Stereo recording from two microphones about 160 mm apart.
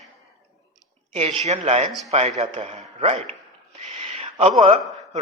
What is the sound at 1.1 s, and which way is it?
A man's voice, 40° right (ahead or behind).